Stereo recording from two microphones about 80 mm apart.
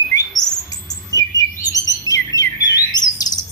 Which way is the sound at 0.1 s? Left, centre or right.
Left.